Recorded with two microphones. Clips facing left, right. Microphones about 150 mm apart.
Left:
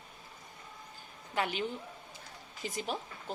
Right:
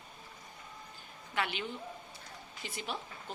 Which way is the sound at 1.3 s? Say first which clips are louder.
Left 3 dB; 35° left (ahead or behind).